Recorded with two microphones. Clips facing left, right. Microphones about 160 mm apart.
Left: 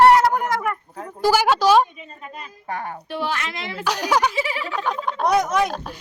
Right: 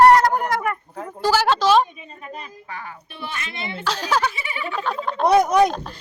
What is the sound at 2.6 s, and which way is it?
Speech, 50° left (ahead or behind).